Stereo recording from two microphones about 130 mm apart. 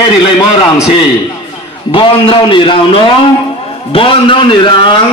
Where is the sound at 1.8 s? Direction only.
40° left (ahead or behind).